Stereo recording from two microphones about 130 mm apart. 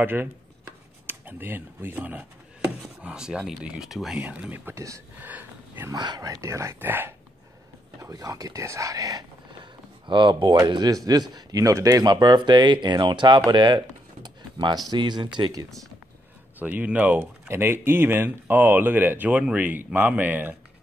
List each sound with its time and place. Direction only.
0.0 s speech: 15° right (ahead or behind)
4.2 s speech: 15° right (ahead or behind)
5.3 s a sound: 15° right (ahead or behind)
5.9 s speech: 30° right (ahead or behind); by 7.2 s 15° right (ahead or behind)
8.0 s speech: 25° right (ahead or behind)
13.5 s a sound: 35° right (ahead or behind)
14.9 s speech: 35° right (ahead or behind)
16.5 s speech: 15° right (ahead or behind)